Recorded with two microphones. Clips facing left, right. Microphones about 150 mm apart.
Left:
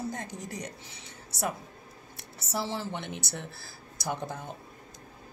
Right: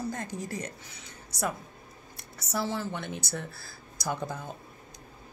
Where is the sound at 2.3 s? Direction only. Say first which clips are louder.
Right 2 dB; 30° left (ahead or behind).